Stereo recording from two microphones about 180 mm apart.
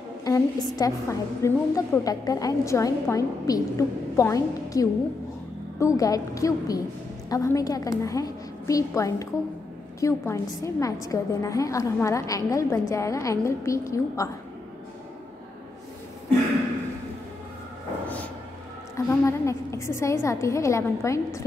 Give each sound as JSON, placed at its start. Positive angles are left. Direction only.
{"t": 0.2, "sound": "a woman's voice", "side_deg": 20}
{"t": 18.0, "sound": "a sound", "side_deg": 10}
{"t": 18.9, "sound": "a woman's voice", "side_deg": 15}